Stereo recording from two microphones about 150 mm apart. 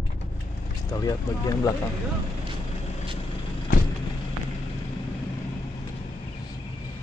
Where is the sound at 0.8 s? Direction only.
25° left (ahead or behind).